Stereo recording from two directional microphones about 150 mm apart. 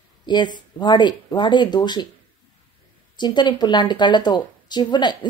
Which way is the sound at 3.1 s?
30° left (ahead or behind).